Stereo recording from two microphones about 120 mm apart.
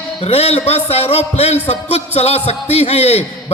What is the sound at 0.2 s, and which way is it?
A man's voice, 55° left (ahead or behind).